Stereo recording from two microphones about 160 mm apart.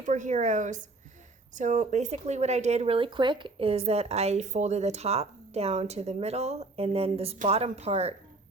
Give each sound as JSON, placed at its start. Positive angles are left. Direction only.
{"t": 0.0, "sound": "a woman's voice", "side_deg": -50}